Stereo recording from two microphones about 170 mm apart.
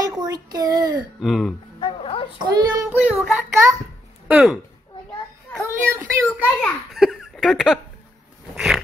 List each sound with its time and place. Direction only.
0.1 s a child's voice: 20° right (ahead or behind)
1.2 s speech: centre (ahead or behind)
1.8 s music: 30° left (ahead or behind)
2.4 s a child's voice: 25° right (ahead or behind)
2.9 s child singing: 5° right (ahead or behind)
4.3 s speech: 5° right (ahead or behind)
5.6 s a sound: 15° right (ahead or behind)
6.2 s a child's voice: 5° left (ahead or behind)
8.5 s dog: centre (ahead or behind)